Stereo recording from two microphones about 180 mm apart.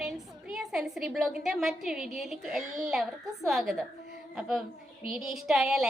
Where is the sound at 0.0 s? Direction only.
Centre (ahead or behind).